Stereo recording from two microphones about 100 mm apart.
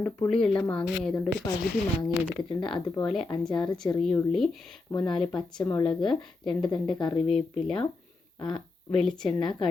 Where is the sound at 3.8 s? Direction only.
35° left (ahead or behind).